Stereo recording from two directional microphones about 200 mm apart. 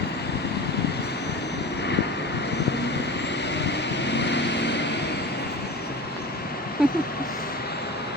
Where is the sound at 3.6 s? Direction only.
60° left (ahead or behind).